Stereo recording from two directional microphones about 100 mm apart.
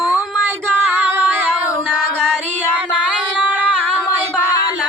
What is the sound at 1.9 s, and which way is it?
Music, 5° left (ahead or behind).